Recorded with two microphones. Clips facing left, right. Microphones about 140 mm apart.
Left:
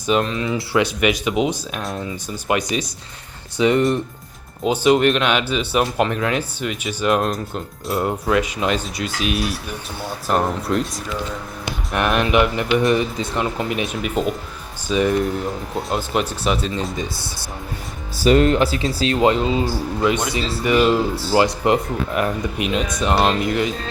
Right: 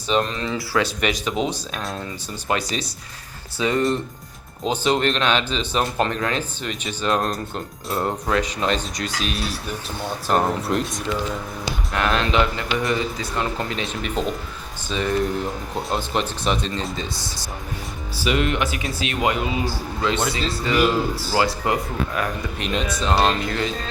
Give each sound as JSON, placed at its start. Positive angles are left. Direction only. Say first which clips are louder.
{"t": 0.1, "sound": "speech", "louder": "left 3 dB", "side_deg": 5}
{"t": 0.5, "sound": "speech", "louder": "left 3 dB", "side_deg": 20}
{"t": 1.0, "sound": "speech", "louder": "left 4 dB", "side_deg": 10}
{"t": 10.2, "sound": "speech", "louder": "left 1 dB", "side_deg": 0}
{"t": 11.9, "sound": "speech", "louder": "left 3 dB", "side_deg": 15}
{"t": 18.2, "sound": "speech", "louder": "left 7 dB", "side_deg": 40}
{"t": 20.0, "sound": "speech", "louder": "left 2 dB", "side_deg": 15}